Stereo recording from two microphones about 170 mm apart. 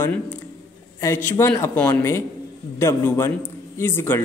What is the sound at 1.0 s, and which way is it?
A man's voice, 15° left (ahead or behind).